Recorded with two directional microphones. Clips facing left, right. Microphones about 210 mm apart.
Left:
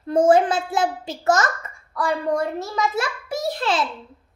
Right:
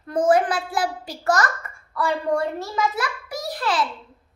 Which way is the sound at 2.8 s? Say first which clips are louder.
Left 1 dB; 25° left (ahead or behind).